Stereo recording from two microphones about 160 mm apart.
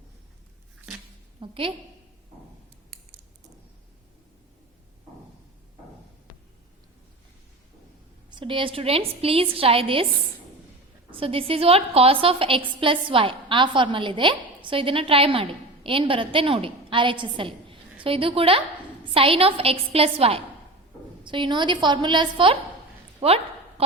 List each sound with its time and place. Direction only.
1.4 s a woman's voice: 35° right (ahead or behind)
8.3 s a woman's voice: 30° right (ahead or behind)
11.1 s a woman's voice: 35° right (ahead or behind)
23.2 s a sound: 40° right (ahead or behind)